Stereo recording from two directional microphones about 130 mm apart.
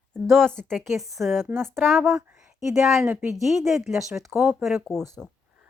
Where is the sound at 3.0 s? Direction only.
15° right (ahead or behind).